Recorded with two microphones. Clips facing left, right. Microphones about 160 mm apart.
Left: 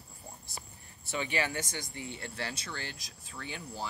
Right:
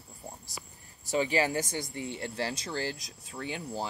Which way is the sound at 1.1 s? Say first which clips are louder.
Right 6 dB; 30° right (ahead or behind).